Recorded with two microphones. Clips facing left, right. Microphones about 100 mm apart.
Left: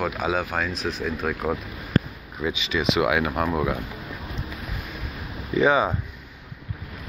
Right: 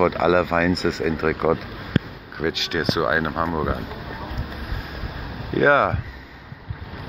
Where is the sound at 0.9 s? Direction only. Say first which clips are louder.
Right 6 dB; 90° right.